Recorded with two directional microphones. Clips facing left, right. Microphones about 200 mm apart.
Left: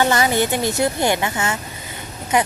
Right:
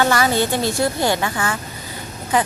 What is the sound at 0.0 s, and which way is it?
Speech, 20° left (ahead or behind).